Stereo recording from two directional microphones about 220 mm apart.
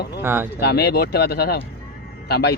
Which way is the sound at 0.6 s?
45° left (ahead or behind).